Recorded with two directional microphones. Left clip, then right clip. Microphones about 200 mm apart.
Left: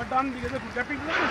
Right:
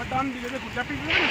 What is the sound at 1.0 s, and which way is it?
Speech, 30° left (ahead or behind).